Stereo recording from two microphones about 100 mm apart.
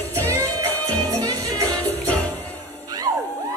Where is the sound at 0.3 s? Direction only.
35° right (ahead or behind).